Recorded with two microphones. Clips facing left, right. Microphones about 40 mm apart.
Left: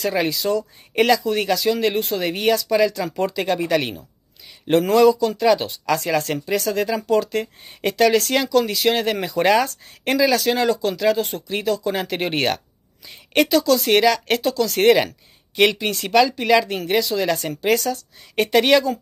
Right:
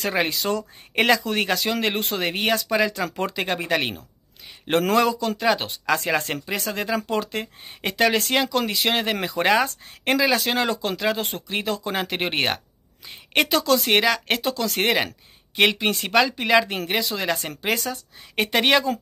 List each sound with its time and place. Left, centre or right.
0.0 s speech: right